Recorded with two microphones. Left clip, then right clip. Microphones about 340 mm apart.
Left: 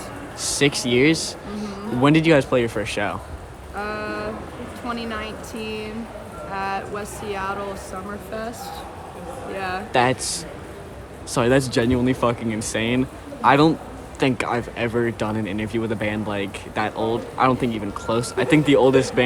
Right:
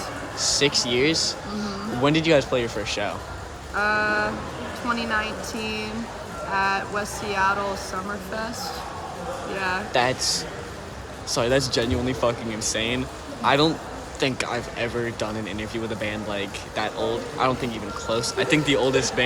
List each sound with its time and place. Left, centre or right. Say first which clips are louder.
0.6 s speech: left 4 dB; left
3.8 s speech: right 6 dB; centre
9.9 s speech: left 4 dB; left
11.3 s speech: left 3 dB; left